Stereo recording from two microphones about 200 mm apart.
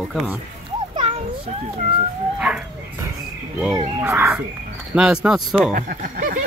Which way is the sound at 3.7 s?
15° right (ahead or behind).